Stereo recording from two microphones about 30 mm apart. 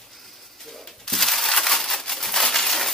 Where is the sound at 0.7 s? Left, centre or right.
Centre.